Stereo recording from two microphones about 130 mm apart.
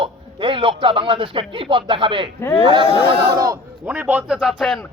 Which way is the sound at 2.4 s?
25° left (ahead or behind).